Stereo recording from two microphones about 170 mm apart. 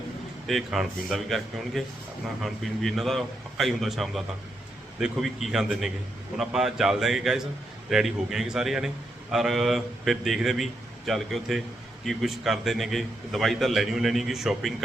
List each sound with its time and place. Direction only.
0.4 s a man's voice: centre (ahead or behind)